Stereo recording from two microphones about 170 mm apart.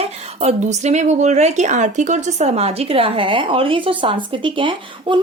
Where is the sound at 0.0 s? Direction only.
40° right (ahead or behind).